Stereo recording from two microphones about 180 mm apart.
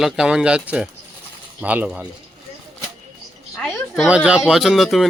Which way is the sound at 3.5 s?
Centre (ahead or behind).